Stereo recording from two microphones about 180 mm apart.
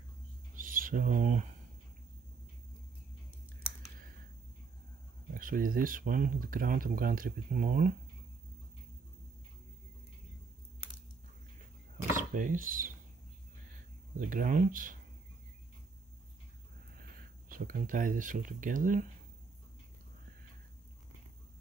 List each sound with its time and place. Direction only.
0.6 s bird: 50° right (ahead or behind)
5.3 s speech: 50° right (ahead or behind)
12.2 s speech: 50° right (ahead or behind)
14.1 s speech: 50° right (ahead or behind)
17.5 s speech: 50° right (ahead or behind)